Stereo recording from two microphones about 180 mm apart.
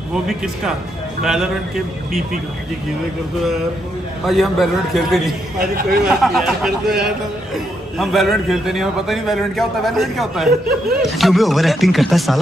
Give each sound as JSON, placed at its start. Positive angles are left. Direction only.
{"t": 0.1, "sound": "a man's voice", "side_deg": -5}
{"t": 4.3, "sound": "a man's voice", "side_deg": 0}
{"t": 5.6, "sound": "a man's voice", "side_deg": -55}
{"t": 6.0, "sound": "a man's voice", "side_deg": 0}